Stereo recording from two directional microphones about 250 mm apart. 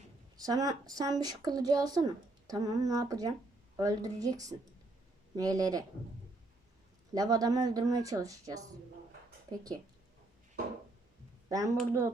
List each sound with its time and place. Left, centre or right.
0.3 s speech: centre
7.1 s speech: centre
11.4 s speech: centre